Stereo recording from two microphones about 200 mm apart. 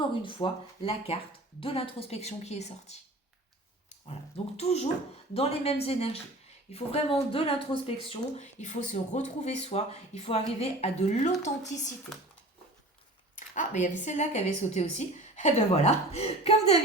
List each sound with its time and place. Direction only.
0.0 s speech: 25° left (ahead or behind)
4.5 s speech: 35° left (ahead or behind)
13.3 s speech: 40° left (ahead or behind)